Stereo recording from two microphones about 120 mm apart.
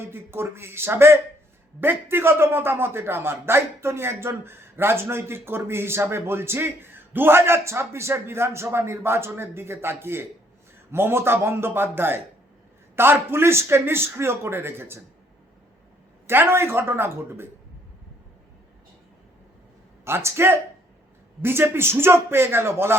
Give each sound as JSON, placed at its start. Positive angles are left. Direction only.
{"t": 0.1, "sound": "a man's voice", "side_deg": -20}
{"t": 16.2, "sound": "a man's voice", "side_deg": -20}
{"t": 20.1, "sound": "a man's voice", "side_deg": -20}